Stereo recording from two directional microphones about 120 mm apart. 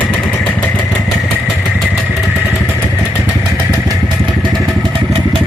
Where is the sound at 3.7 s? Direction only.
35° right (ahead or behind).